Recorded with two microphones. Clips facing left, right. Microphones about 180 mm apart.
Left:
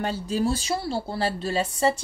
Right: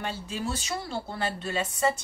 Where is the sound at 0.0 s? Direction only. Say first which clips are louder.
Left 8 dB; 40° left (ahead or behind).